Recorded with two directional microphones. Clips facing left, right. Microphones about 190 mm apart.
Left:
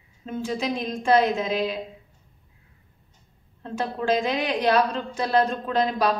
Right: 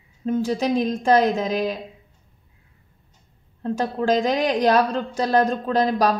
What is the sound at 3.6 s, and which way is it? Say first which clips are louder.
A woman's voice: right 5 dB; 40° right (ahead or behind).